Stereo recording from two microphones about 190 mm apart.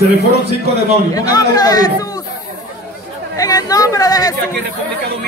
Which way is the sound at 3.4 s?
20° left (ahead or behind).